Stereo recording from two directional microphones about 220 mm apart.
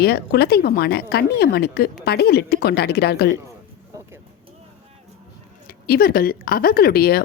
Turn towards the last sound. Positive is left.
turn(degrees=45)  # may be behind; listen again after turning